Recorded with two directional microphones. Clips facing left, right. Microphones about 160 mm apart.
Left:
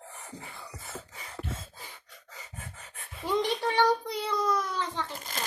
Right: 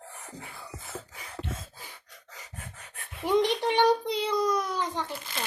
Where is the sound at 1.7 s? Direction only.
Centre (ahead or behind).